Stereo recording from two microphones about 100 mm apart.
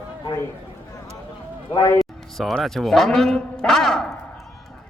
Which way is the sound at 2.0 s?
Centre (ahead or behind).